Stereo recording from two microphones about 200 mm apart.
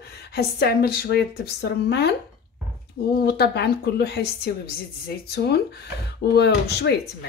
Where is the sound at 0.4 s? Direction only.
50° left (ahead or behind).